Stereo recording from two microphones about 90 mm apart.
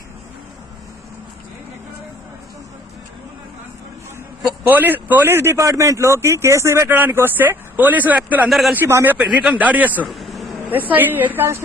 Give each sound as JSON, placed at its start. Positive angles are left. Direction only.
{"t": 4.6, "sound": "a man's voice", "side_deg": -20}
{"t": 8.4, "sound": "speech", "side_deg": 0}
{"t": 8.7, "sound": "a man's voice", "side_deg": -25}
{"t": 9.2, "sound": "a man's voice", "side_deg": -10}
{"t": 10.1, "sound": "vehicle", "side_deg": 0}
{"t": 10.7, "sound": "a man's voice", "side_deg": -20}